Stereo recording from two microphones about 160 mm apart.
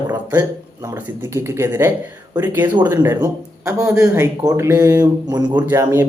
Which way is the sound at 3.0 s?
20° right (ahead or behind).